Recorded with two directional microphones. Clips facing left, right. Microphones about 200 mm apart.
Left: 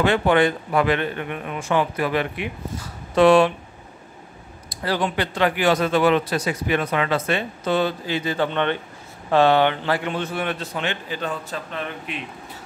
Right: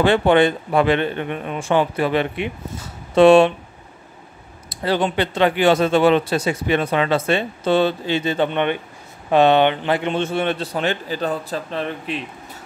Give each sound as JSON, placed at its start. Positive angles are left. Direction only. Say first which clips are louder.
{"t": 0.0, "sound": "speech", "louder": "right 3 dB", "side_deg": -30}
{"t": 4.8, "sound": "speech", "louder": "right 4 dB", "side_deg": -25}